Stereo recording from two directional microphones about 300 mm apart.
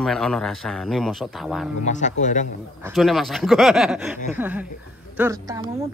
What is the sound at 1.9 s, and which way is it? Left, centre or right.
Speech, left.